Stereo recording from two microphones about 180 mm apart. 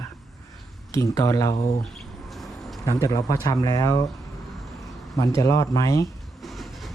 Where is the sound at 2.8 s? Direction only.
20° left (ahead or behind).